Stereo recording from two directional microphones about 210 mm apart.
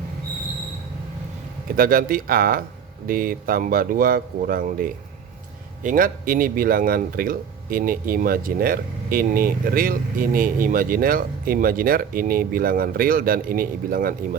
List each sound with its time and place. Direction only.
1.7 s speech: 40° right (ahead or behind)